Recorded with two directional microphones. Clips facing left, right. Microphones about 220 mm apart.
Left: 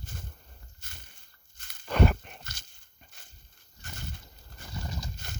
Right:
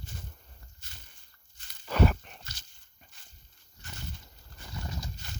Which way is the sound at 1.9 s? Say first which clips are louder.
Left 1 dB; 5° right (ahead or behind).